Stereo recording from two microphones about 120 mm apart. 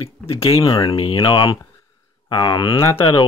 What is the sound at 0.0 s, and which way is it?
Speech, 50° left (ahead or behind).